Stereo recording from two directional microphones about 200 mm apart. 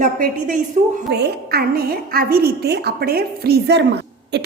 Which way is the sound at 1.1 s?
55° right (ahead or behind).